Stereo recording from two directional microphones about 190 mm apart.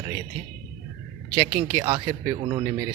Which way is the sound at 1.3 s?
25° right (ahead or behind).